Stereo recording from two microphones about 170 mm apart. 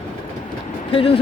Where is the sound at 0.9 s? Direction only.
35° left (ahead or behind).